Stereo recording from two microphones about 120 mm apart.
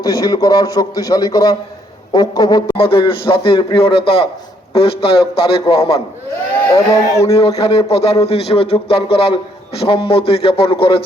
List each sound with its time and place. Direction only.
0.0 s a man's voice: 35° left (ahead or behind)
2.7 s speech: 50° left (ahead or behind)
6.7 s speech: 25° left (ahead or behind)
7.3 s speech: 55° left (ahead or behind)